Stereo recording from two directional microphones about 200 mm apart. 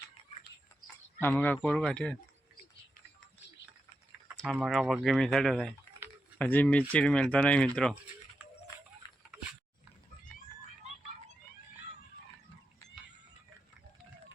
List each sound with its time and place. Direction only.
1.2 s speech: 10° left (ahead or behind)
4.4 s speech: 5° right (ahead or behind)
9.0 s a sound: 20° left (ahead or behind)